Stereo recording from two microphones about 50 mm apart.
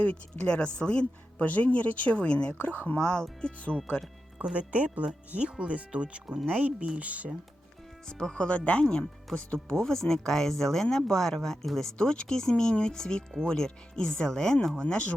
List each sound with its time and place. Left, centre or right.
0.0 s speech: left
2.6 s speech: left
3.0 s speech: centre
4.5 s speech: right
8.0 s speech: centre
11.9 s speech: centre